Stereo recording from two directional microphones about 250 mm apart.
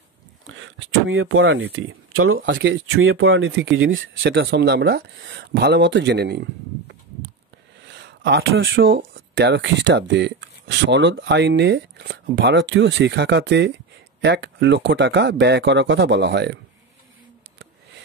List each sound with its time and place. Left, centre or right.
0.6 s speech: right
7.9 s speech: right